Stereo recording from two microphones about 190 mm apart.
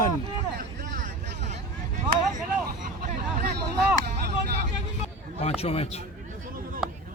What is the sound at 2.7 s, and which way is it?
Hubbub, 45° right (ahead or behind).